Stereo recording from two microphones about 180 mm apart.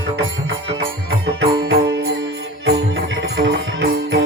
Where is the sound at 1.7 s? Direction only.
65° right (ahead or behind).